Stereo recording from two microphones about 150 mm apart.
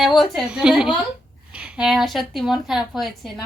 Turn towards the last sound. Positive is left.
turn(degrees=0)  # may be behind; listen again after turning